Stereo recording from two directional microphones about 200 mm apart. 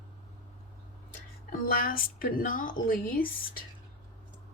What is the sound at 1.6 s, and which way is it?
Speech, 50° left (ahead or behind).